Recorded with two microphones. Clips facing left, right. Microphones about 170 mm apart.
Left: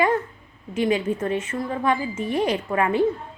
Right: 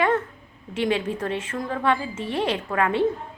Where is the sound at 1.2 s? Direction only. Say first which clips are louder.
Left 2 dB; 5° left (ahead or behind).